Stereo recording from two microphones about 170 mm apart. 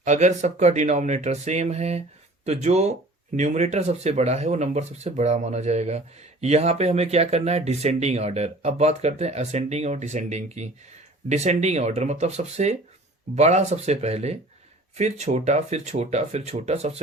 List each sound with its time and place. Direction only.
0.0 s speech: 45° right (ahead or behind)